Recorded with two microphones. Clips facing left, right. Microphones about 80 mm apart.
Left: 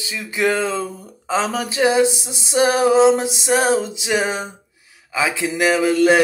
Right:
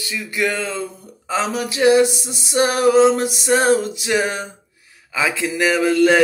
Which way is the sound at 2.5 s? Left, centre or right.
Left.